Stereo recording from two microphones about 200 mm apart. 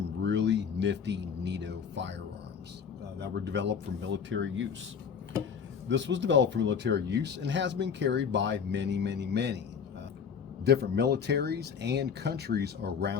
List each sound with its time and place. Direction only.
0.2 s a sound: 65° right (ahead or behind)
3.2 s speech: 60° right (ahead or behind)
5.9 s speech: 65° right (ahead or behind)
10.7 s speech: 55° right (ahead or behind)